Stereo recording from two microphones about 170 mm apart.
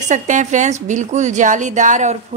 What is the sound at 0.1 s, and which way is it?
A woman's voice, 45° right (ahead or behind).